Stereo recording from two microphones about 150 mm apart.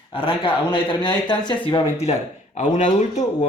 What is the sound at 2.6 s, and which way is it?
Speech, 50° left (ahead or behind).